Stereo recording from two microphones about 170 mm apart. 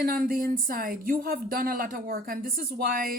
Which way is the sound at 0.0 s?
60° right (ahead or behind).